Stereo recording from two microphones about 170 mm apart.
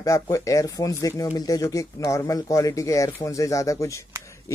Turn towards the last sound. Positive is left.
turn(degrees=15)  # may be behind; listen again after turning